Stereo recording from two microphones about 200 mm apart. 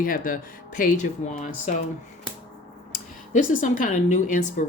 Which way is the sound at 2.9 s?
40° left (ahead or behind).